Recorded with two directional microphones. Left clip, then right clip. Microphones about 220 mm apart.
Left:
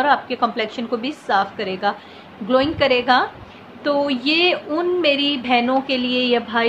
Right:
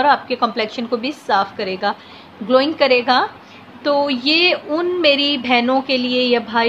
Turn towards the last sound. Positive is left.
turn(degrees=-15)  # may be behind; listen again after turning